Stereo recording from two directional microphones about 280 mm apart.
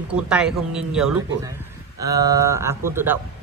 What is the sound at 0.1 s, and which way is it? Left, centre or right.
A man's voice, centre.